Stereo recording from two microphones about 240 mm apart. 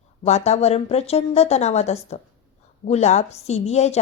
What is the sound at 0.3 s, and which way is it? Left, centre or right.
A woman's voice, left.